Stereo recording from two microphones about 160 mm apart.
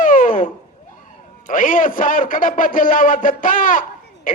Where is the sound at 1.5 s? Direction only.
55° left (ahead or behind).